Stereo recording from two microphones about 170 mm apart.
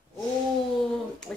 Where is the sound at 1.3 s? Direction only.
5° left (ahead or behind).